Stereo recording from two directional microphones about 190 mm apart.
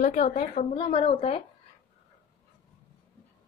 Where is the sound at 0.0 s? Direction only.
40° left (ahead or behind).